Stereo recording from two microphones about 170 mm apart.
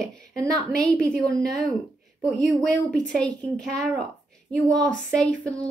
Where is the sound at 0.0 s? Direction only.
5° left (ahead or behind).